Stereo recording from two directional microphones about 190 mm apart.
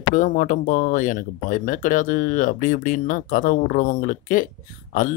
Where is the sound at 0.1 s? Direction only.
45° left (ahead or behind).